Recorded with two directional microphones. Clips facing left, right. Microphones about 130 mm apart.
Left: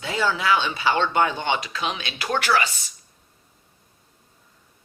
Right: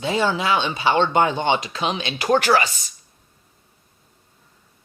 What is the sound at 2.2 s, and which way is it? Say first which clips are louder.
Speech: right 5 dB; 40° right (ahead or behind).